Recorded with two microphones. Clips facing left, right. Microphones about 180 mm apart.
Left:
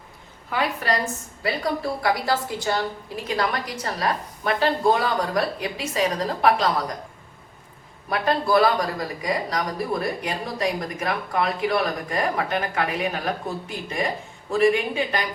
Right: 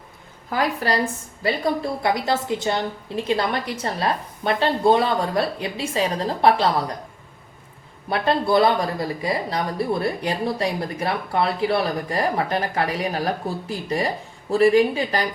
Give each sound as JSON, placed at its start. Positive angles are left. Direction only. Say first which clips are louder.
{"t": 0.5, "sound": "a woman's voice", "louder": "right 2 dB", "side_deg": -35}
{"t": 8.1, "sound": "speech", "louder": "right 1 dB", "side_deg": -25}